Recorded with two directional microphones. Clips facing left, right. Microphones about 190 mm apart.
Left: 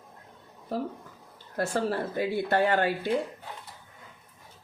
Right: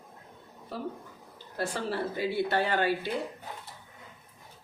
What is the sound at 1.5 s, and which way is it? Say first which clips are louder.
Speech: left 4 dB; 45° left (ahead or behind).